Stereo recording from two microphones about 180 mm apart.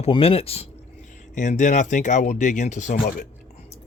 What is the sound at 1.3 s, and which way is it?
Speech, 45° left (ahead or behind).